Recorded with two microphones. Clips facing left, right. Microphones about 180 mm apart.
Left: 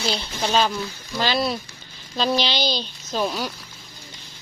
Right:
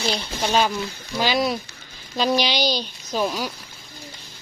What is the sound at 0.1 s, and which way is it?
A woman's voice, 10° right (ahead or behind).